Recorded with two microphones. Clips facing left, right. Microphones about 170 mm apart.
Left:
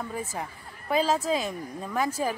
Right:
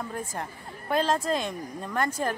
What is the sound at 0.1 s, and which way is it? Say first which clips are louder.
A woman's voice: left 1 dB; 5° left (ahead or behind).